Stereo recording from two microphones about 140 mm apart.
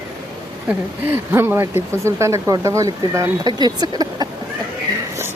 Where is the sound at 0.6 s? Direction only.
15° right (ahead or behind).